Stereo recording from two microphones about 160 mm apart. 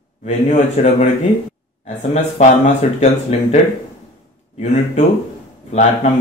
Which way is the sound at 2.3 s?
45° left (ahead or behind).